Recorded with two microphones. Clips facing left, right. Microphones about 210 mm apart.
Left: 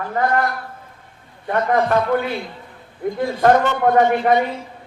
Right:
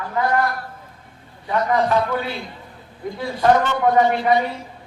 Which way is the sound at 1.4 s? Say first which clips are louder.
Left 1 dB; 55° left (ahead or behind).